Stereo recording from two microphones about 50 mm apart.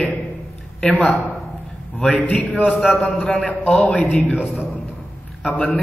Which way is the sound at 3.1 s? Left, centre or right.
Centre.